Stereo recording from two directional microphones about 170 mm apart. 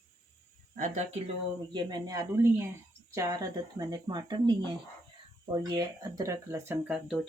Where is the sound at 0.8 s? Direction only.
50° right (ahead or behind).